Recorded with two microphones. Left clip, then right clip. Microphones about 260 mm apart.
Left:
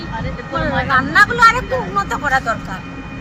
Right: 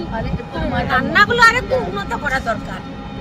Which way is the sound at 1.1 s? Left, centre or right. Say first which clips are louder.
Even; centre.